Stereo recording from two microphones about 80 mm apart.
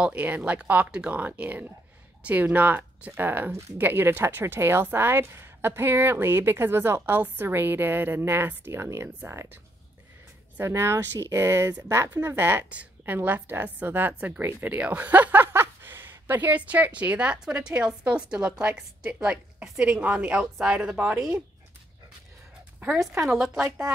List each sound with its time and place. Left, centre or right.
0.0 s speech: centre; by 9.5 s right
10.6 s speech: right; by 18.9 s centre
19.0 s speech: right
19.3 s speech: centre
23.2 s a woman's voice: centre